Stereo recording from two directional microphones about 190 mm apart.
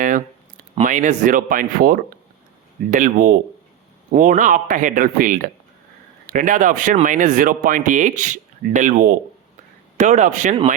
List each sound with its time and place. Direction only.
0.8 s speech: 40° right (ahead or behind)